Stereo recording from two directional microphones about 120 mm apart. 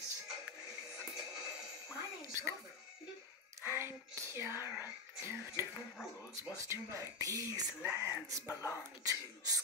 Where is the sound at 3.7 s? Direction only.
20° right (ahead or behind).